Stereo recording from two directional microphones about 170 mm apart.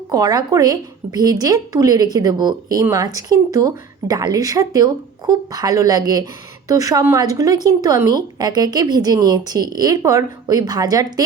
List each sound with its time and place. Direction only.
0.1 s speech: 20° right (ahead or behind)